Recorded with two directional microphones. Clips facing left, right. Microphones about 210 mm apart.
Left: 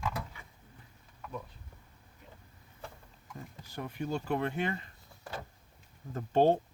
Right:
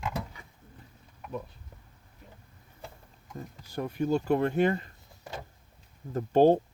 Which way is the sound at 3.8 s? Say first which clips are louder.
Right 8 dB; 40° right (ahead or behind).